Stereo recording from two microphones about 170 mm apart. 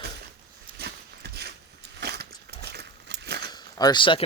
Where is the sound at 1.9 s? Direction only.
70° right (ahead or behind).